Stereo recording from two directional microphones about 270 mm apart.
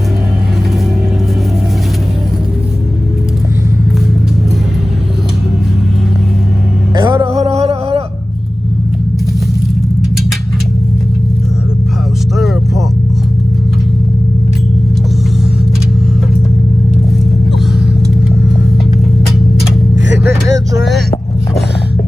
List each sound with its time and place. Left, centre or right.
6.9 s music: centre
20.2 s music: centre